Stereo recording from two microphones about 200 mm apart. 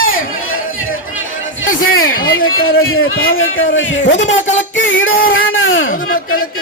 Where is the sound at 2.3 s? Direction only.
90° left; by 4.0 s 75° left (ahead or behind).